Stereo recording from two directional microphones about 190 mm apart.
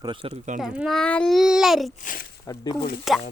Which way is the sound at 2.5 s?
15° left (ahead or behind).